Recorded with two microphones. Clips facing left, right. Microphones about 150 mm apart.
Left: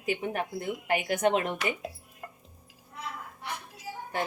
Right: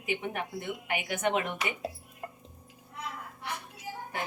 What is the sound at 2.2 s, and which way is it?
Music, 25° right (ahead or behind).